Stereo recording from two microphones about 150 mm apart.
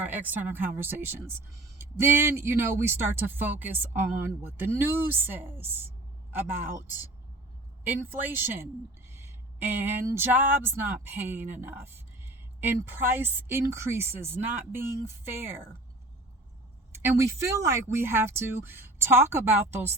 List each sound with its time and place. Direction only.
0.0 s speech: 10° right (ahead or behind)
16.9 s speech: 15° right (ahead or behind)